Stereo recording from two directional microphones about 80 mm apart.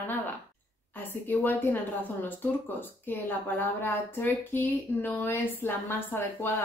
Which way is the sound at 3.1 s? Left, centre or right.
Left.